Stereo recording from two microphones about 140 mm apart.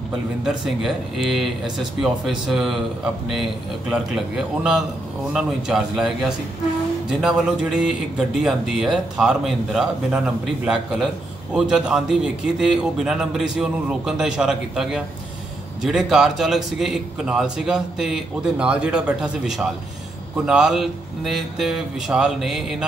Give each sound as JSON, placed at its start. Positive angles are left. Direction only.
{"t": 0.5, "sound": "speech", "side_deg": -5}
{"t": 5.3, "sound": "speech", "side_deg": -5}